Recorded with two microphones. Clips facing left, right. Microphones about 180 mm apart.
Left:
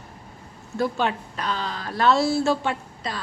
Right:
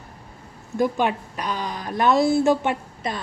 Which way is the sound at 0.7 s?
15° right (ahead or behind).